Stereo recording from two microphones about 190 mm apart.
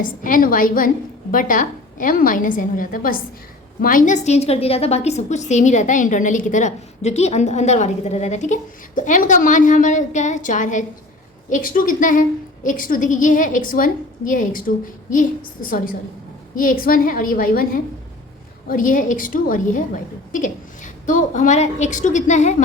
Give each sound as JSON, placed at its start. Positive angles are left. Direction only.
{"t": 0.0, "sound": "a woman's voice", "side_deg": 45}
{"t": 18.7, "sound": "a woman's voice", "side_deg": 45}